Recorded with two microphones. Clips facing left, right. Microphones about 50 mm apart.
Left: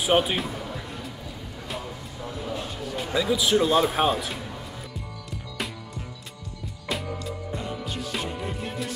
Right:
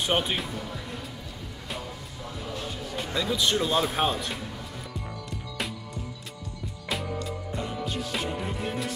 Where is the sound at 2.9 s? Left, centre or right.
Centre.